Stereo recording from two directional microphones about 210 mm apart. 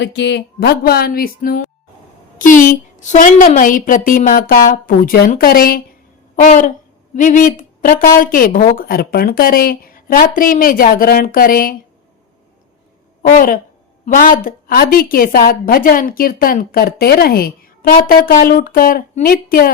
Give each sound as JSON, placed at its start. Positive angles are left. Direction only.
{"t": 0.0, "sound": "a woman's voice", "side_deg": 55}
{"t": 13.3, "sound": "a woman's voice", "side_deg": 40}